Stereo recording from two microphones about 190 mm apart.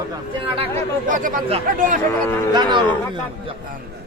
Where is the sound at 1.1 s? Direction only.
45° right (ahead or behind).